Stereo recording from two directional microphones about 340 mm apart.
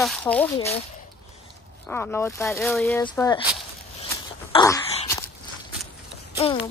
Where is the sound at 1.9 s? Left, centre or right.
Centre.